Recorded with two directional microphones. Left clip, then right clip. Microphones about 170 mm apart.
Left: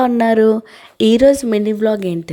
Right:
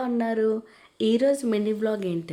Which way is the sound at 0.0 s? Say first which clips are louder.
Left 12 dB; 60° left (ahead or behind).